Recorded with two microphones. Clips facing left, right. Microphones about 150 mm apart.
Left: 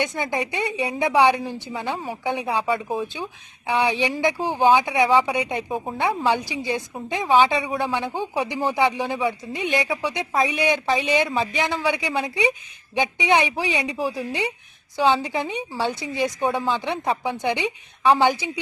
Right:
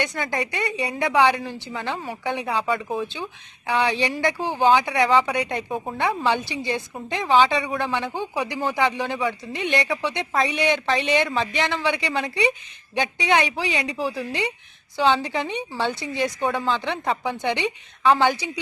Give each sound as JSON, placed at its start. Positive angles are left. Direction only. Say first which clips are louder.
{"t": 0.2, "sound": "speech", "louder": "left 1 dB", "side_deg": 15}
{"t": 2.6, "sound": "speech", "louder": "left 1 dB", "side_deg": 5}
{"t": 3.7, "sound": "speech", "louder": "left 1 dB", "side_deg": 15}
{"t": 5.7, "sound": "speech", "louder": "left 1 dB", "side_deg": 0}
{"t": 6.5, "sound": "speech", "louder": "left 1 dB", "side_deg": 15}
{"t": 16.0, "sound": "speech", "louder": "left 1 dB", "side_deg": 20}